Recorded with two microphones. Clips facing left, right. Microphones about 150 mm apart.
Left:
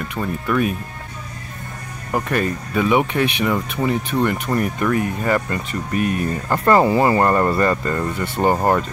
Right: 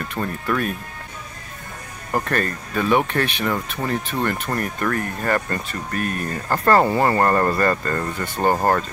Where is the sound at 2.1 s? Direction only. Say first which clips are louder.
Left 2 dB; 10° left (ahead or behind).